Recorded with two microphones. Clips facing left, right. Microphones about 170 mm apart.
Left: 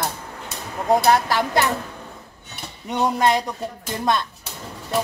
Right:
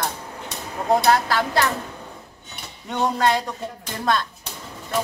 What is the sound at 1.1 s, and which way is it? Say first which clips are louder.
Speech: left 1 dB; 15° left (ahead or behind).